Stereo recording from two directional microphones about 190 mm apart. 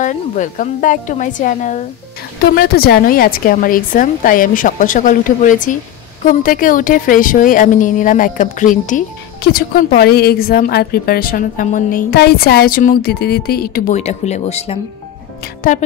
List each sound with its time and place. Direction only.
0.0 s a woman's voice: 40° left (ahead or behind)
2.5 s a woman's voice: 55° left (ahead or behind)
13.9 s speech: 35° left (ahead or behind)
15.6 s a woman's voice: 50° left (ahead or behind)